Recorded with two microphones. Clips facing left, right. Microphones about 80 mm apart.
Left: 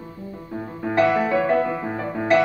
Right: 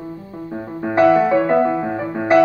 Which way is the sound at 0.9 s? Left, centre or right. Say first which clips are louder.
Right 6 dB; right.